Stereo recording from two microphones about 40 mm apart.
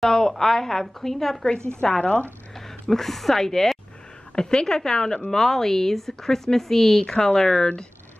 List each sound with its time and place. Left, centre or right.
0.0 s a woman's voice: centre
1.8 s a woman's voice: centre
2.9 s a woman's voice: centre